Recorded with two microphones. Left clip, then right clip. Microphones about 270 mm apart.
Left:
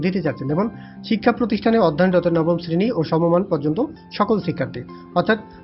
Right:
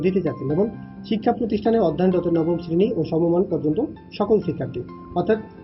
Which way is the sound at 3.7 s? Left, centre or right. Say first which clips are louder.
Left 1 dB; left.